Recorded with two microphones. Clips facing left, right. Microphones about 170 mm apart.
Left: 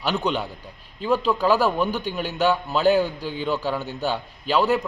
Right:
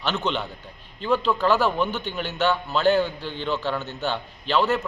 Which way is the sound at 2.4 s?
15° left (ahead or behind).